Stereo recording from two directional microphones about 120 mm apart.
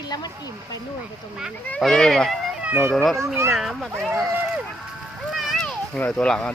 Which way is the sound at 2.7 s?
20° right (ahead or behind).